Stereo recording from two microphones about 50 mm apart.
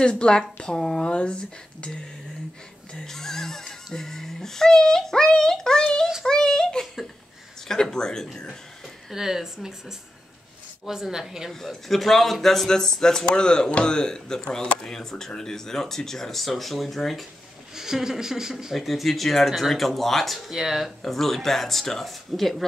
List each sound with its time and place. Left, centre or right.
0.0 s speech: centre
2.9 s speech: centre
9.1 s speech: centre
11.6 s speech: centre
17.7 s speech: centre
21.0 s speech: centre